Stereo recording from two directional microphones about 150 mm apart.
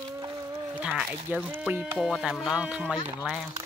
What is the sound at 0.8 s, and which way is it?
Speech, 10° right (ahead or behind).